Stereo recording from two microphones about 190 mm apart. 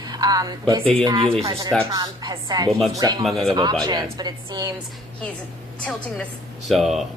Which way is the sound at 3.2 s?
Centre (ahead or behind).